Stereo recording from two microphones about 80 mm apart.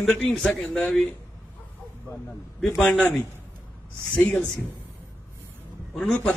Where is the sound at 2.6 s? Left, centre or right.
Centre.